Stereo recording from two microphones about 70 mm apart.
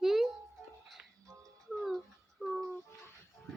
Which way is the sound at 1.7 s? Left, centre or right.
Centre.